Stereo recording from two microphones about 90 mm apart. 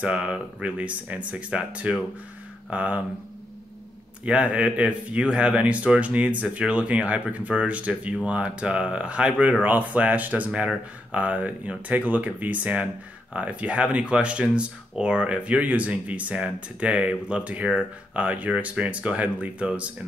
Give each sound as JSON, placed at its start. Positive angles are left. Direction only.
{"t": 0.0, "sound": "speech", "side_deg": -15}
{"t": 4.2, "sound": "speech", "side_deg": -15}